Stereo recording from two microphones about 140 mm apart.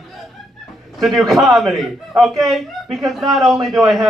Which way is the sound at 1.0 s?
Centre (ahead or behind).